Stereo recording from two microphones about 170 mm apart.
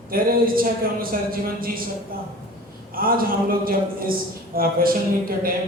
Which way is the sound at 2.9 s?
60° right (ahead or behind).